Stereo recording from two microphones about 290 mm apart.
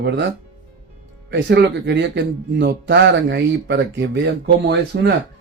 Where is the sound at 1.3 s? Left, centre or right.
Right.